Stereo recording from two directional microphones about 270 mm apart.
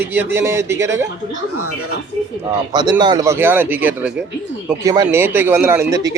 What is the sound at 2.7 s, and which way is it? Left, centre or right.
Speech, centre.